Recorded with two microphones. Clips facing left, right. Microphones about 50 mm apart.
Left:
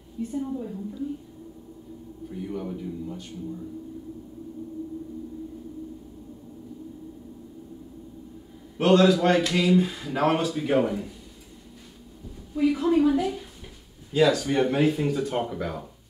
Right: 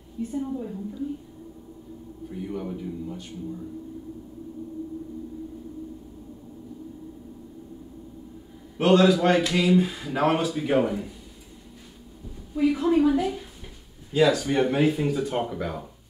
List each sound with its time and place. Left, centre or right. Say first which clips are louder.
0.2 s speech: even; centre
2.2 s speech: even; centre
8.7 s speech: even; centre
12.5 s speech: even; centre